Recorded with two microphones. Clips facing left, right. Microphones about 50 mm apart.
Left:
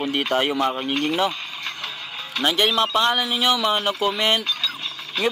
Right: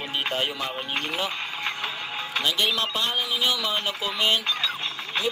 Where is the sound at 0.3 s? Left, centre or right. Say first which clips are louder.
Left 9 dB; left.